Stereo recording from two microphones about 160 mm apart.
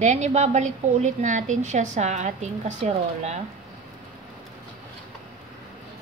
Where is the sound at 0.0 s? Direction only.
45° right (ahead or behind).